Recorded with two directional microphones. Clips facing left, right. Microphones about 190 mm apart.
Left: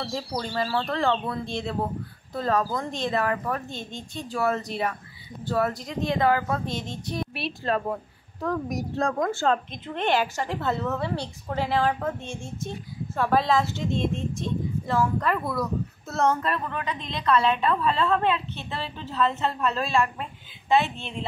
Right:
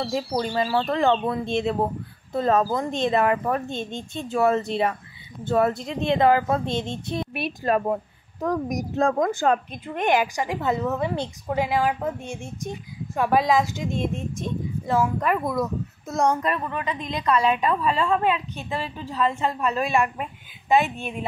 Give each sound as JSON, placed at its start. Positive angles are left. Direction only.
{"t": 0.3, "sound": "speech", "side_deg": -20}
{"t": 7.7, "sound": "a woman's voice", "side_deg": -15}